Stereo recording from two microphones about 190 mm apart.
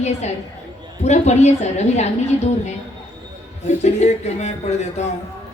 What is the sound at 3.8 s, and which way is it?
A woman's voice, 35° left (ahead or behind).